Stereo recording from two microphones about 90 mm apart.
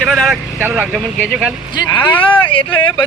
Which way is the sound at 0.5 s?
15° right (ahead or behind).